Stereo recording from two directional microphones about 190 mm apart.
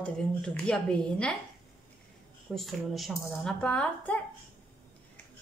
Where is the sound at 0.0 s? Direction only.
5° left (ahead or behind).